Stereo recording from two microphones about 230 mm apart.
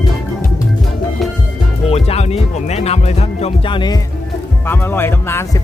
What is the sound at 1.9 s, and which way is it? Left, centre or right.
Music, left.